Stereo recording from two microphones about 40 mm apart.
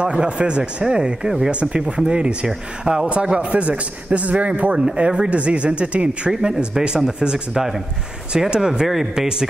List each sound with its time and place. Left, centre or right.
0.0 s speech: right
1.5 s a man's voice: right
4.7 s a man's voice: right